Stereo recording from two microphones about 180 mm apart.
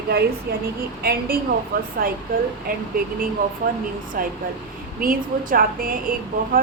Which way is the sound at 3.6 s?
50° right (ahead or behind).